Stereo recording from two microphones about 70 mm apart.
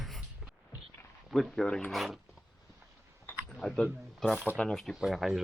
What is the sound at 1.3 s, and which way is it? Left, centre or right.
Speech, centre.